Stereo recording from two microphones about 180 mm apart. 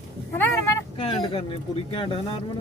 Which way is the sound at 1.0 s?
30° left (ahead or behind).